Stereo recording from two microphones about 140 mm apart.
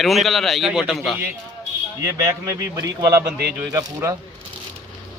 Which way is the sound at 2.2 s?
25° right (ahead or behind).